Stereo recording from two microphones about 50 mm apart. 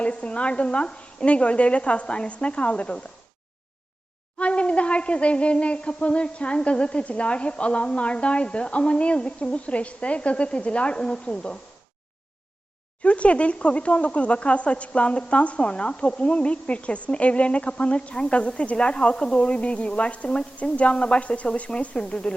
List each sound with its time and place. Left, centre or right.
0.0 s speech: left
4.4 s speech: left
13.0 s speech: left